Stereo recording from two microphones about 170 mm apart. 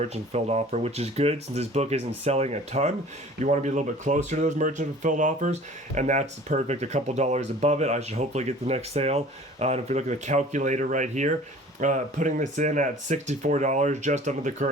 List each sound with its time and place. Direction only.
0.0 s speech: 40° right (ahead or behind)